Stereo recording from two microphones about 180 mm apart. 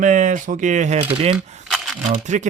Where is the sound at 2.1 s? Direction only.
40° right (ahead or behind).